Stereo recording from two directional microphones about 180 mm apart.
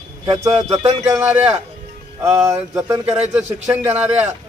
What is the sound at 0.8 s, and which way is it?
Speech, 35° right (ahead or behind).